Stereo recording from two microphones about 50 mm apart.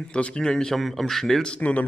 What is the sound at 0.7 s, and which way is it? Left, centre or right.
Speech, centre.